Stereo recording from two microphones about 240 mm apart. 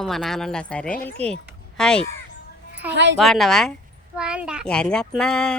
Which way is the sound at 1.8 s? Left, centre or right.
Centre.